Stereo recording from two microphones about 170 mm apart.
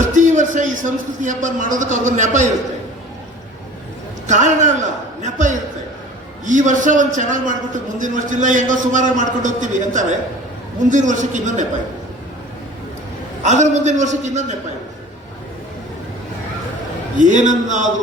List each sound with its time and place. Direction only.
0.1 s a man's voice: 50° right (ahead or behind)
4.3 s a man's voice: 45° right (ahead or behind)
13.4 s a man's voice: 45° right (ahead or behind)
17.2 s a man's voice: 50° right (ahead or behind)